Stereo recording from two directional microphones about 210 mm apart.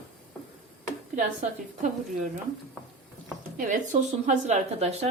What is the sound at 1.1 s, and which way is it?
Speech, 35° right (ahead or behind).